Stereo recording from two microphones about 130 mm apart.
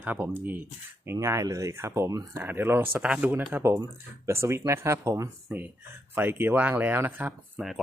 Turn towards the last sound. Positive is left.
turn(degrees=-15)  # may be behind; listen again after turning